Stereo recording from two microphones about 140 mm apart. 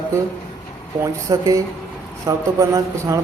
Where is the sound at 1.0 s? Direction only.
25° right (ahead or behind).